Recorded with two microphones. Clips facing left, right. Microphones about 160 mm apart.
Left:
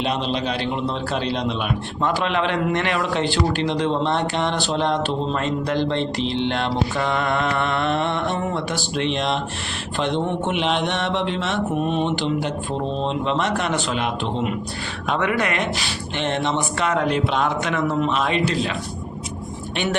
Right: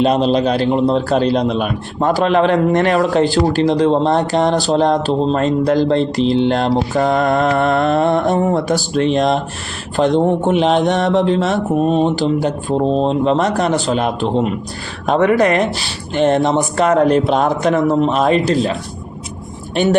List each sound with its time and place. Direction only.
0.0 s a man's voice: 40° right (ahead or behind)